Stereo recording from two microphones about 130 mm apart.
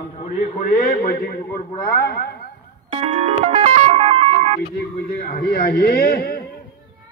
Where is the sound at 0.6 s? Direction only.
80° left.